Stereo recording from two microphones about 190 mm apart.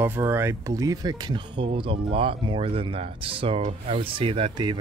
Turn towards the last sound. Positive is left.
turn(degrees=-25)  # may be behind; listen again after turning